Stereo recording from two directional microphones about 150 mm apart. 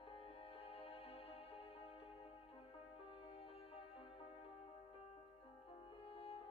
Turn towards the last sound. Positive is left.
turn(degrees=40)  # may be behind; listen again after turning